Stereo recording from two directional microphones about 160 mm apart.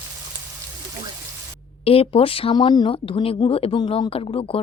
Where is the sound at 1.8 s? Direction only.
35° left (ahead or behind).